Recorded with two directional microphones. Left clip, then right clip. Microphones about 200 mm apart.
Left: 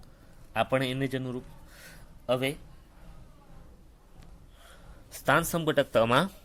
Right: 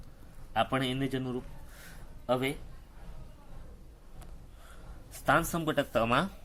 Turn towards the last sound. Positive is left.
turn(degrees=40)  # may be behind; listen again after turning